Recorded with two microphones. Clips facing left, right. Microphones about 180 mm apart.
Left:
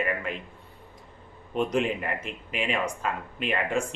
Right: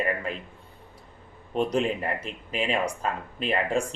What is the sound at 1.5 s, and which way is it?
Speech, 35° right (ahead or behind).